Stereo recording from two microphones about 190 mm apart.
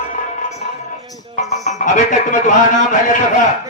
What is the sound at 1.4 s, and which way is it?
A man's voice, 35° left (ahead or behind).